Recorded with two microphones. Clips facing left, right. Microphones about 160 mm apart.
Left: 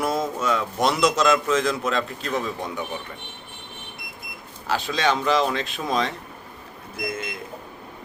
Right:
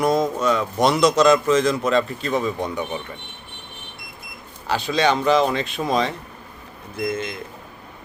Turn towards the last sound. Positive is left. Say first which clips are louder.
# right 5 dB
turn(degrees=5)  # may be behind; listen again after turning